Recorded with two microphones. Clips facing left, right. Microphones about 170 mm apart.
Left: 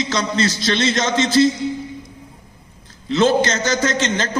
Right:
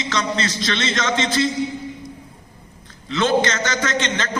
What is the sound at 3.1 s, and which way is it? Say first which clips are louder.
A man's voice: left 3 dB; 35° left (ahead or behind).